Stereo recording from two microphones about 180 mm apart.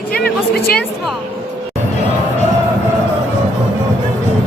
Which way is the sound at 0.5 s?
60° left (ahead or behind).